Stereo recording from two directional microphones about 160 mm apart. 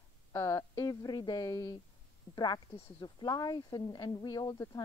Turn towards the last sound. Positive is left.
turn(degrees=20)  # may be behind; listen again after turning